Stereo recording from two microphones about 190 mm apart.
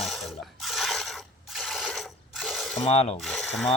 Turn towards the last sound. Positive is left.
turn(degrees=0)  # may be behind; listen again after turning